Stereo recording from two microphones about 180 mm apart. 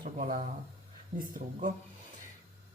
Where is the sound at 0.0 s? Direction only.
50° right (ahead or behind).